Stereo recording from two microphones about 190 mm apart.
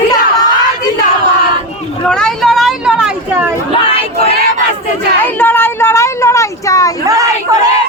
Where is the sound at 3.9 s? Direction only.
30° left (ahead or behind).